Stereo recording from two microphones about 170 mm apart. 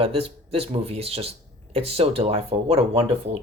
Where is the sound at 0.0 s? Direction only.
35° right (ahead or behind).